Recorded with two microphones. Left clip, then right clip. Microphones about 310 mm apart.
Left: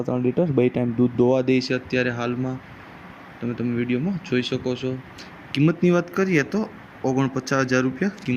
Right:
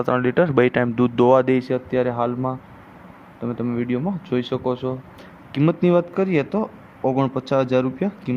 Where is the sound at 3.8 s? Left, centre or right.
Centre.